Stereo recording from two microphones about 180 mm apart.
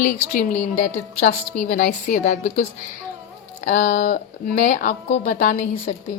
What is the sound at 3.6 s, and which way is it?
A woman's voice, 40° left (ahead or behind).